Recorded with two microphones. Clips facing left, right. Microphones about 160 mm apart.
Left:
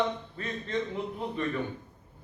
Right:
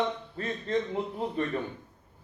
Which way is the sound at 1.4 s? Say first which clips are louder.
Right 1 dB; 40° right (ahead or behind).